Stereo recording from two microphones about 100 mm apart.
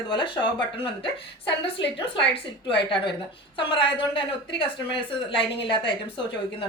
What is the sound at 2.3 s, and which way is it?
Speech, 60° left (ahead or behind).